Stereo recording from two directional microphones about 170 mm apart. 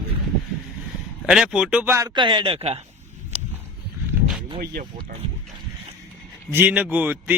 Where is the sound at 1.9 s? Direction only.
20° right (ahead or behind).